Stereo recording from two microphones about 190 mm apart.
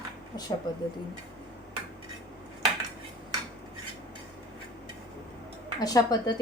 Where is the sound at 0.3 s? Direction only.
20° left (ahead or behind).